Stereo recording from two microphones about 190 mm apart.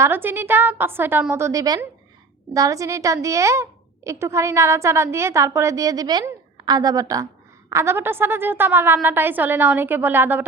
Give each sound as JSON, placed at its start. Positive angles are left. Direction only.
{"t": 0.0, "sound": "a woman's voice", "side_deg": -10}